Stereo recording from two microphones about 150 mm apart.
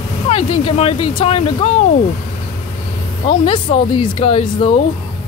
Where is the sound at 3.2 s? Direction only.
40° left (ahead or behind).